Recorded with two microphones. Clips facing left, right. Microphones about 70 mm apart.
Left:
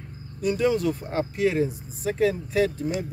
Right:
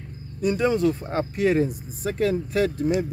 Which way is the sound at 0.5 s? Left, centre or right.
Right.